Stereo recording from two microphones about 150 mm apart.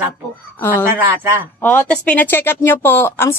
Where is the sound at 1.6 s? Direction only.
10° left (ahead or behind).